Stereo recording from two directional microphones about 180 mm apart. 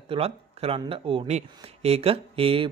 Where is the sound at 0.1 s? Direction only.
30° right (ahead or behind).